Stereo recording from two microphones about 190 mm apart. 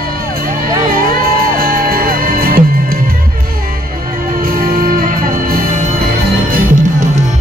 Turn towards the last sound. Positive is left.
turn(degrees=-45)  # may be behind; listen again after turning